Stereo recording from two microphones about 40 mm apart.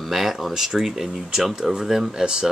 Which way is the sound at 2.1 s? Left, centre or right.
Centre.